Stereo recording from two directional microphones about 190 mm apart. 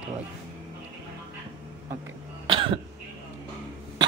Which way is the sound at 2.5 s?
25° right (ahead or behind).